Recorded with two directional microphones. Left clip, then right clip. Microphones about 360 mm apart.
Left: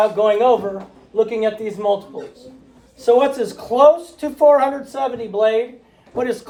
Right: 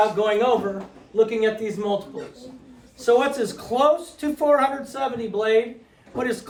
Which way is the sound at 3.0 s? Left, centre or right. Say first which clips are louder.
Left 4 dB; centre.